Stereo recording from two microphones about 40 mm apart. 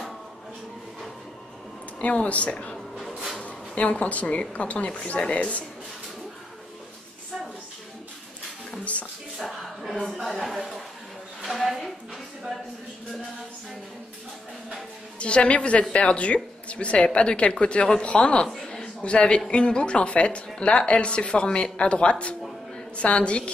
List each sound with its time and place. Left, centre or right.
2.0 s speech: left
2.5 s speech: left
3.0 s music: centre
3.3 s speech: left
9.6 s a sound: centre
10.0 s speech: centre
11.4 s a sound: centre
15.1 s a woman's voice: left